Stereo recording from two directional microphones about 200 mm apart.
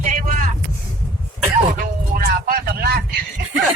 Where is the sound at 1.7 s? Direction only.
50° right (ahead or behind).